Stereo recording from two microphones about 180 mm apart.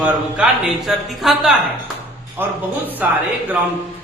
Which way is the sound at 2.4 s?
10° right (ahead or behind).